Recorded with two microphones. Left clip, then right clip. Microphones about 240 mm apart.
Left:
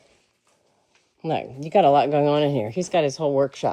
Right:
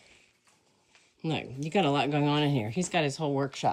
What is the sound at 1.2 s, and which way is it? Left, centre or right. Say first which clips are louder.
Speech: left 8 dB; left.